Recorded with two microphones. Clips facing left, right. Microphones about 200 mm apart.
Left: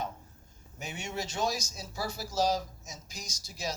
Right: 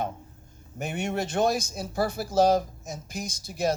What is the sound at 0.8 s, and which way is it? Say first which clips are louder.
Speech: right 8 dB; 55° right (ahead or behind).